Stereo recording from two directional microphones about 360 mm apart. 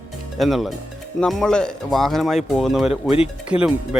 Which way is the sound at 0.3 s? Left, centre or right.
Centre.